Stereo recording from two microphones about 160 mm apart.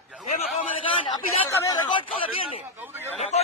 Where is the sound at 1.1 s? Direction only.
25° left (ahead or behind).